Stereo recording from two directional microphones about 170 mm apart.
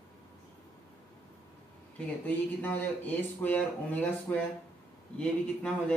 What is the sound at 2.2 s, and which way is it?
A man's voice, 10° left (ahead or behind).